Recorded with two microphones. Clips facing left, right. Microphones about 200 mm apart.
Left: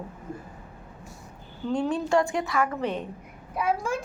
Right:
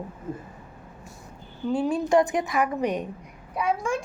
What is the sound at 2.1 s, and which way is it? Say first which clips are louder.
Speech: right 3 dB; 20° right (ahead or behind).